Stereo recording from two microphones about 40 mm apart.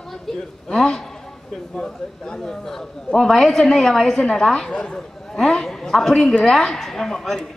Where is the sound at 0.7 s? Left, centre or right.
Centre.